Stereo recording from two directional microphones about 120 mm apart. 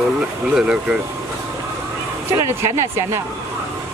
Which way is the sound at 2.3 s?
20° right (ahead or behind).